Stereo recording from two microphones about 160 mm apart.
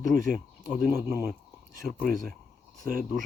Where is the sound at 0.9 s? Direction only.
15° right (ahead or behind).